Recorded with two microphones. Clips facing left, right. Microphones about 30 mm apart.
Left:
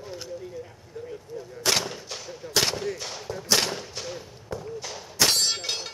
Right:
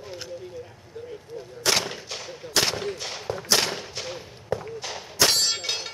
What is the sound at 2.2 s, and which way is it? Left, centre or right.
Gunshot, right.